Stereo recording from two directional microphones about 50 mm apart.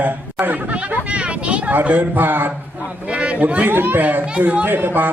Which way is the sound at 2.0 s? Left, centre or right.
Right.